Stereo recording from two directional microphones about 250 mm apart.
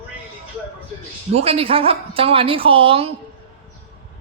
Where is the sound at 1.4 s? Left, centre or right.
Right.